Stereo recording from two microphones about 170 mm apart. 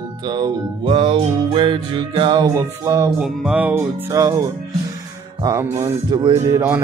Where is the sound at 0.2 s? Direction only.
25° right (ahead or behind).